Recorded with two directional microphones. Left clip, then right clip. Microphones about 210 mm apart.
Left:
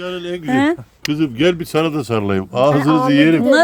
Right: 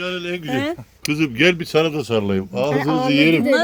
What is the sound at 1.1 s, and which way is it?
Speech, 15° left (ahead or behind).